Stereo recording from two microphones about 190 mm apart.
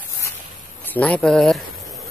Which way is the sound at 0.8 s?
5° left (ahead or behind).